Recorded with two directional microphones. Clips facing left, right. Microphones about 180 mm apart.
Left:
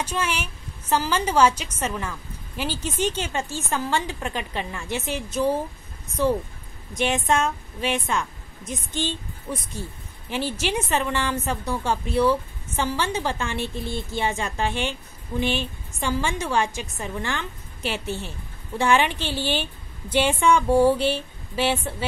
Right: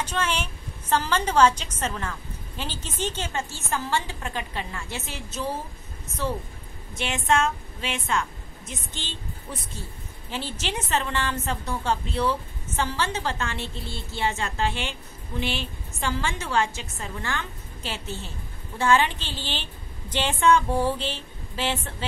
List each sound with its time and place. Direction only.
0.0 s a woman's voice: 10° left (ahead or behind)
6.9 s a woman's voice: 15° left (ahead or behind)